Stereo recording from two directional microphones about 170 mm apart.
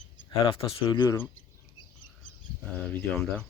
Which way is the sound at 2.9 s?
5° left (ahead or behind).